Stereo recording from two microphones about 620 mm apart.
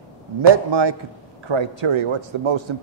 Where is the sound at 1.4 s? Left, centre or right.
Right.